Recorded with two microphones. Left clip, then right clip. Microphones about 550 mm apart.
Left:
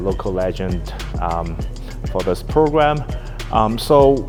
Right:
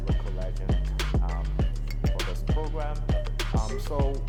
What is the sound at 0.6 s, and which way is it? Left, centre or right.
Speech, left.